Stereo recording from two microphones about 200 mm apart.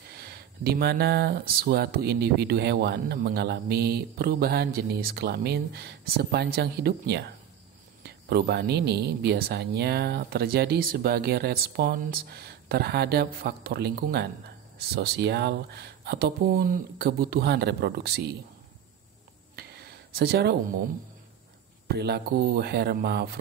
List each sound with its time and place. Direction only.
0.1 s speech: 55° right (ahead or behind)
19.5 s a sound: 55° right (ahead or behind)
21.8 s speech: 55° right (ahead or behind)